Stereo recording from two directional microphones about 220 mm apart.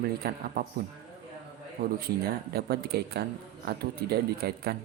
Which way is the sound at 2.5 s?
45° right (ahead or behind).